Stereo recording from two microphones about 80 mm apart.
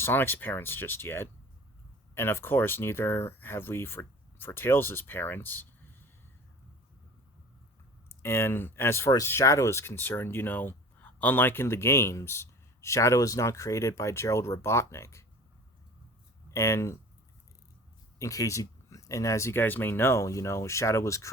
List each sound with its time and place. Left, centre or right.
0.0 s speech: left
8.2 s speech: left
16.5 s speech: left
18.2 s speech: left